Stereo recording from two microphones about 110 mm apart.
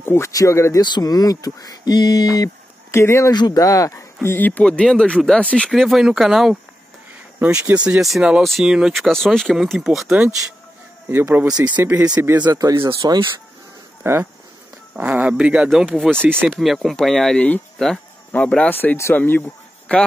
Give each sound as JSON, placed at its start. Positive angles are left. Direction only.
{"t": 0.0, "sound": "speech", "side_deg": 20}
{"t": 0.8, "sound": "speech", "side_deg": 40}
{"t": 3.3, "sound": "speech", "side_deg": 35}
{"t": 5.7, "sound": "speech", "side_deg": 0}
{"t": 7.3, "sound": "speech", "side_deg": -15}
{"t": 11.1, "sound": "speech", "side_deg": -20}
{"t": 12.7, "sound": "speech", "side_deg": -50}
{"t": 14.0, "sound": "speech", "side_deg": -20}
{"t": 15.0, "sound": "speech", "side_deg": -10}
{"t": 16.3, "sound": "speech", "side_deg": -20}
{"t": 16.5, "sound": "speech", "side_deg": 0}